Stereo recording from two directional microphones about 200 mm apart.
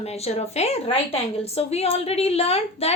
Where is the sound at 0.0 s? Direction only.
30° left (ahead or behind).